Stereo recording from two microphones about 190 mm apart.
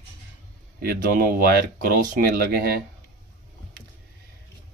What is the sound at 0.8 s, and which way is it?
Speech, 50° right (ahead or behind).